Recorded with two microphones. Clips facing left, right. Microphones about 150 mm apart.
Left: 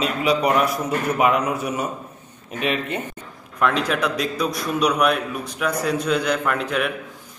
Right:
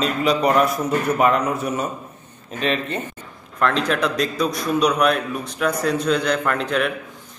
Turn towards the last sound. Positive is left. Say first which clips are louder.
# right 1 dB
turn(degrees=5)  # may be behind; listen again after turning